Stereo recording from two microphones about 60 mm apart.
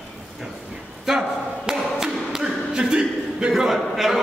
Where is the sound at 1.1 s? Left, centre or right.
Centre.